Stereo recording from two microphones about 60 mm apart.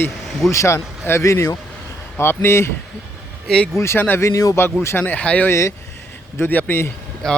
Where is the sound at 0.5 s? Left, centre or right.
Left.